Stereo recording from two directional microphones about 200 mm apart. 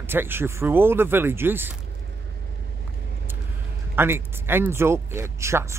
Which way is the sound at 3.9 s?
10° right (ahead or behind).